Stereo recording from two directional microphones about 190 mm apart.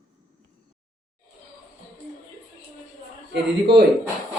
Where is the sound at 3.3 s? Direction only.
60° right (ahead or behind).